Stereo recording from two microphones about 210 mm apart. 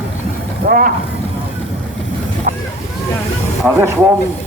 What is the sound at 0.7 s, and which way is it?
Speech, 45° right (ahead or behind).